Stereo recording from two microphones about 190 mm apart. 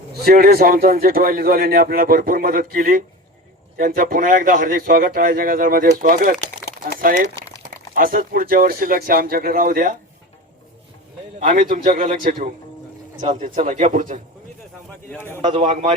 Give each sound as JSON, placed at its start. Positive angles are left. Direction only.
{"t": 0.1, "sound": "a man's voice", "side_deg": -50}
{"t": 11.3, "sound": "speech", "side_deg": -35}
{"t": 15.1, "sound": "a man's voice", "side_deg": 10}
{"t": 15.5, "sound": "speech", "side_deg": -35}